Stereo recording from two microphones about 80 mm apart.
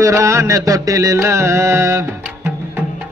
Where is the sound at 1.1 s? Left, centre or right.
Right.